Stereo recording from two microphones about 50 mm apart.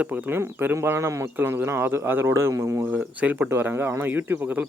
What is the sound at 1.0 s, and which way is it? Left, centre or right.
Speech, right.